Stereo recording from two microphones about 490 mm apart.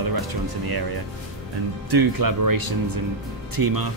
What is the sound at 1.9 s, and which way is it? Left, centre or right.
Speech, right.